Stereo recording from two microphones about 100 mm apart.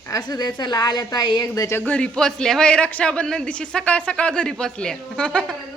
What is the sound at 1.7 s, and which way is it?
A man's voice, 15° left (ahead or behind).